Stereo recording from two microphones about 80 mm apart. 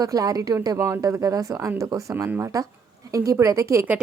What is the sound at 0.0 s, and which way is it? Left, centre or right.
A woman's voice, right.